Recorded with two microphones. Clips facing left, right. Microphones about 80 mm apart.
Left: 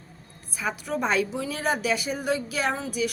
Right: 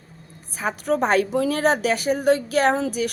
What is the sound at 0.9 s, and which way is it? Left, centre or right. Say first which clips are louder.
A woman's voice: right 7 dB; right.